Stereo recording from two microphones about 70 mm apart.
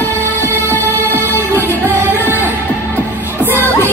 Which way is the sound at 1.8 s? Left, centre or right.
Right.